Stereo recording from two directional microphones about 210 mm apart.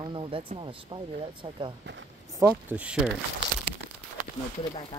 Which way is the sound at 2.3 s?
10° right (ahead or behind).